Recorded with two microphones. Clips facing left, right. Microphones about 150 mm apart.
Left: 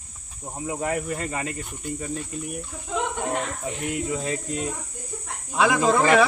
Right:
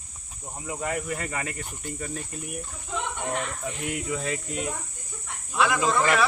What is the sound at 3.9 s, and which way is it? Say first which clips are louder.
Speech: left 3 dB; 25° left (ahead or behind).